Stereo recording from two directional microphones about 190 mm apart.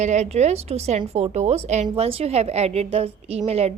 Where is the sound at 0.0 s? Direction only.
35° right (ahead or behind).